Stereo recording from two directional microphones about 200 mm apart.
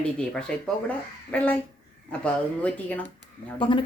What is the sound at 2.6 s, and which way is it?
Speech, 10° left (ahead or behind).